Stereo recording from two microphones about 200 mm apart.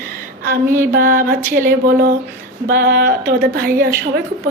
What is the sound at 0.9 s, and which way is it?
Speech, 45° right (ahead or behind).